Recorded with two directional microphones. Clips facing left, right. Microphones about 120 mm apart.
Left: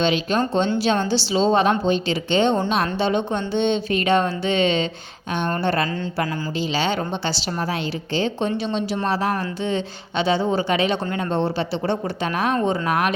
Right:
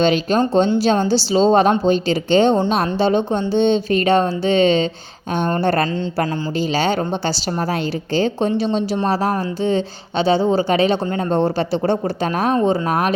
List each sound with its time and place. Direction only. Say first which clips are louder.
0.0 s a woman's voice: right 4 dB; 40° right (ahead or behind)